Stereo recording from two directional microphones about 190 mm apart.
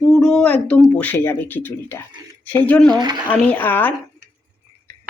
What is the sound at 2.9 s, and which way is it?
Speech, 25° right (ahead or behind).